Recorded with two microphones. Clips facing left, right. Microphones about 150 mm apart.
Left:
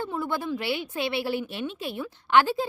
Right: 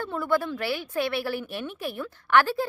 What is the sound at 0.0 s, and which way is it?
A woman's voice, 20° left (ahead or behind).